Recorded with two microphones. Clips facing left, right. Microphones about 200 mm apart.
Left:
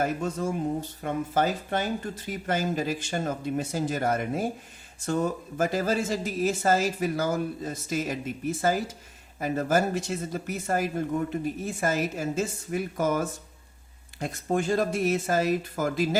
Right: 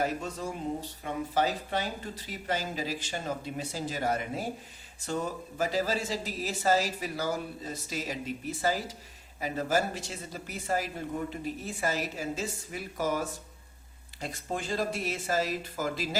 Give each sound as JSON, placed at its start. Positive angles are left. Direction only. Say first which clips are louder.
{"t": 0.0, "sound": "speech", "louder": "left 4 dB", "side_deg": 45}